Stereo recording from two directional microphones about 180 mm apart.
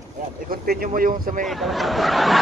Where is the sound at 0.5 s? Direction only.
55° right (ahead or behind).